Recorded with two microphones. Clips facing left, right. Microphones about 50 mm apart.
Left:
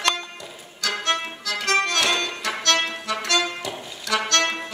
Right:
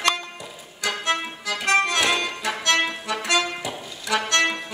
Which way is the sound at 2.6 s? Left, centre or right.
Centre.